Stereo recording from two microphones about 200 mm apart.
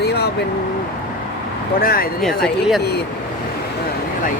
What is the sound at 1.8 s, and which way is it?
Speech, 50° left (ahead or behind).